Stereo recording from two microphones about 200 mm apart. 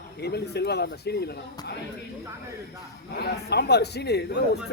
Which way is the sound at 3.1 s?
55° left (ahead or behind).